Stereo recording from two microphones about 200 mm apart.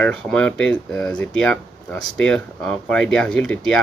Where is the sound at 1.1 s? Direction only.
5° left (ahead or behind).